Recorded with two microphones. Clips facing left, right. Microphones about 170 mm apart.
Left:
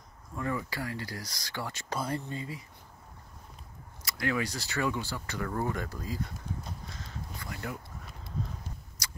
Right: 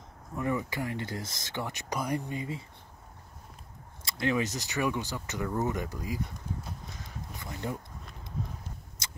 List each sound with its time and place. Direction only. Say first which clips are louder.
0.4 s speech: right 3 dB; 20° right (ahead or behind)
4.0 s speech: right 2 dB; 25° right (ahead or behind)
7.1 s crow: even; 20° right (ahead or behind)
9.0 s a sound: left 1 dB; 25° right (ahead or behind)